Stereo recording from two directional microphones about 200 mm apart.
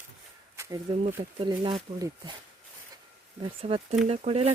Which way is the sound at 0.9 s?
25° right (ahead or behind).